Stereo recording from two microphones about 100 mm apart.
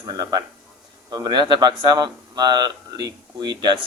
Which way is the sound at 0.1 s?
45° right (ahead or behind).